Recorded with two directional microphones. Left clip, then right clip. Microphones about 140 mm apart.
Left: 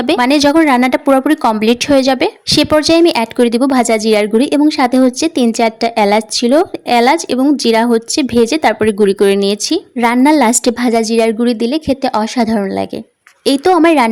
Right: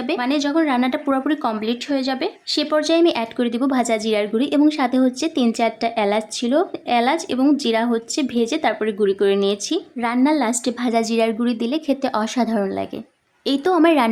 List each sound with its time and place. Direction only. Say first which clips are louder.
0.0 s a woman's voice: left 11 dB; 60° left (ahead or behind)
10.9 s a woman's voice: left 5 dB; 30° left (ahead or behind)